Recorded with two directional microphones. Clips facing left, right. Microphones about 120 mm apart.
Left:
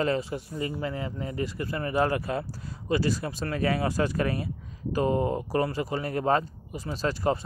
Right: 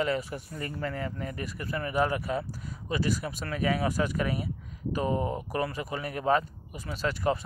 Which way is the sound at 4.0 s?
45° left (ahead or behind).